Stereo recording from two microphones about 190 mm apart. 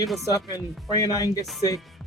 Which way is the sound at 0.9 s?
20° left (ahead or behind).